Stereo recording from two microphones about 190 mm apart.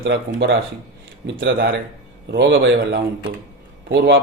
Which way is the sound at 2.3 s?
70° right (ahead or behind).